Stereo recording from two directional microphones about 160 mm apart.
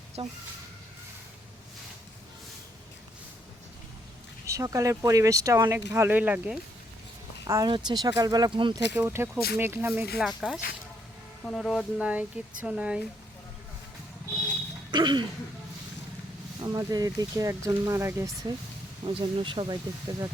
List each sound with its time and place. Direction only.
0.2 s speech: 35° right (ahead or behind)
4.4 s speech: 20° right (ahead or behind)
7.4 s speech: 25° right (ahead or behind)
8.9 s speech: 15° right (ahead or behind)
14.9 s speech: 30° right (ahead or behind)
16.6 s speech: 25° right (ahead or behind)
19.0 s speech: 30° right (ahead or behind)